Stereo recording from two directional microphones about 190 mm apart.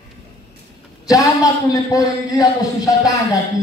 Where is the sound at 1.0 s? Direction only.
20° left (ahead or behind).